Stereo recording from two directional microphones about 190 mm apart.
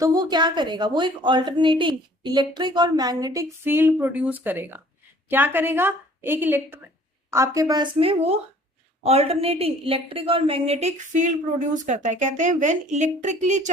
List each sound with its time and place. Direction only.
0.0 s a woman's voice: 20° right (ahead or behind); by 13.7 s 40° right (ahead or behind)